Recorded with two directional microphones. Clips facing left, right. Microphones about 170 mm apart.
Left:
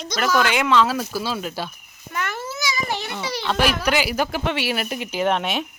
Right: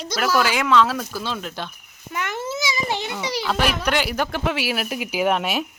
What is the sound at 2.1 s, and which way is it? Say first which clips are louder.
A child's voice: right 2 dB; 20° right (ahead or behind).